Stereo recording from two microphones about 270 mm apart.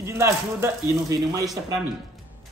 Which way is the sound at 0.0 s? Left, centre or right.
Centre.